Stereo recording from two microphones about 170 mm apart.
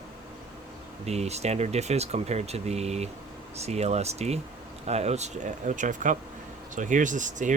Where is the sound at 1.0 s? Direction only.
40° right (ahead or behind).